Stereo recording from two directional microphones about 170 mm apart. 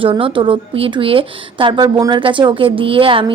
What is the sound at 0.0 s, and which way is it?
Speech, 30° right (ahead or behind).